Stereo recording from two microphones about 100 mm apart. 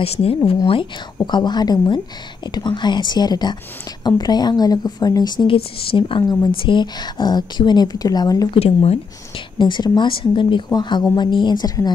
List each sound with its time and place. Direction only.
0.0 s speech: 75° left (ahead or behind)
1.2 s a woman's voice: 45° left (ahead or behind)
5.6 s a woman's voice: 65° left (ahead or behind); by 8.5 s 40° left (ahead or behind)
8.5 s speech: 90° left
9.6 s a woman's voice: 50° left (ahead or behind)